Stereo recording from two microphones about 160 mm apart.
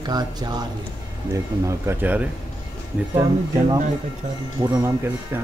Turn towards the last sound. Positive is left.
turn(degrees=-15)  # may be behind; listen again after turning